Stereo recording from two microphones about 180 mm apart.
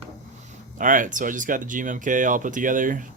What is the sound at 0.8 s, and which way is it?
Speech, 45° right (ahead or behind).